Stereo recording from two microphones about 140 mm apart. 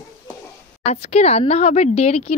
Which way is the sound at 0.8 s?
50° left (ahead or behind).